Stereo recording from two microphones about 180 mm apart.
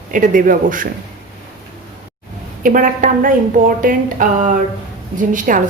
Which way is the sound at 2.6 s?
50° right (ahead or behind).